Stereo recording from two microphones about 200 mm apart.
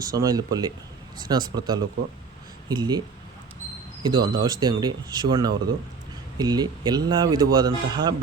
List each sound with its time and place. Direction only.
0.0 s speech: 20° right (ahead or behind)
4.0 s speech: 20° right (ahead or behind)